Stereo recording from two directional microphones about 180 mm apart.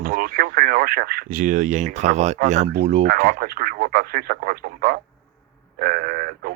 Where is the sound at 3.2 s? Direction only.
55° right (ahead or behind).